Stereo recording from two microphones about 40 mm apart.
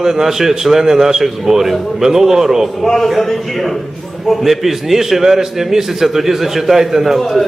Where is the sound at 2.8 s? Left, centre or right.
Centre.